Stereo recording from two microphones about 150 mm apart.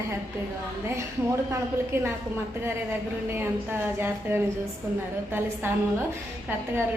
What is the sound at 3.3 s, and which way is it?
A woman's voice, 15° right (ahead or behind).